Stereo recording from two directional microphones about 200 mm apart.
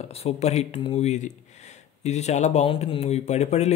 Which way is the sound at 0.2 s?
30° left (ahead or behind).